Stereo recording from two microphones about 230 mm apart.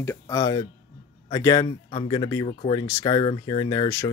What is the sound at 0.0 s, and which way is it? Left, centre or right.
Speech, centre.